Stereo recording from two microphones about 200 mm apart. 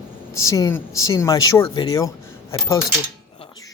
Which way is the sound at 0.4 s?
15° left (ahead or behind).